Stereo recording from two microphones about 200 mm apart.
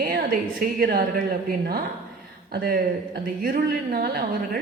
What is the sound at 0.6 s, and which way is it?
A woman's voice, 50° right (ahead or behind).